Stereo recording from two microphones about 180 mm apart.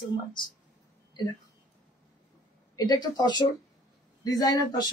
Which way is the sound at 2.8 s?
20° left (ahead or behind).